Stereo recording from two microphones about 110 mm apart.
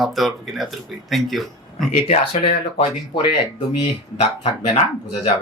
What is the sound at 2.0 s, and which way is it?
Speech, 55° left (ahead or behind).